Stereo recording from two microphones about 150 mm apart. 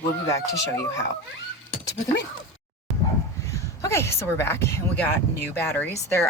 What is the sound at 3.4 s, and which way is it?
Speech, 20° left (ahead or behind).